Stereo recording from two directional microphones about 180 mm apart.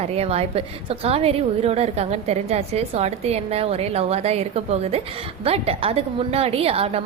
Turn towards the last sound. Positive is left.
turn(degrees=-35)  # may be behind; listen again after turning